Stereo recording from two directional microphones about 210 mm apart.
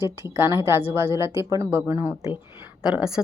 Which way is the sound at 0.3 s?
10° right (ahead or behind).